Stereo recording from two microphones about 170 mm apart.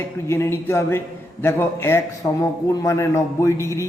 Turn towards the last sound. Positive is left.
turn(degrees=15)  # may be behind; listen again after turning